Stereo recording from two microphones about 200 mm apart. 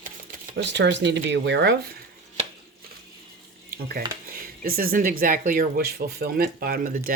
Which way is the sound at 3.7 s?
50° right (ahead or behind).